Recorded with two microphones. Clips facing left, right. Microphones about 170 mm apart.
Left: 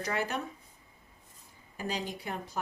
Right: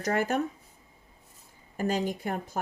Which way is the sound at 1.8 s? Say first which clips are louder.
Right 7 dB; 45° right (ahead or behind).